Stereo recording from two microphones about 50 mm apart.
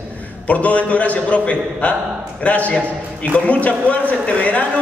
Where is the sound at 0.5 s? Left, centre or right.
Left.